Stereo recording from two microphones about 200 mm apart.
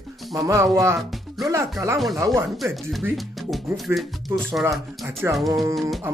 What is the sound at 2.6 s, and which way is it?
Speech, centre (ahead or behind).